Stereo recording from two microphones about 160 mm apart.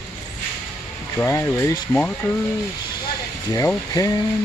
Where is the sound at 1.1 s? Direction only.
15° left (ahead or behind).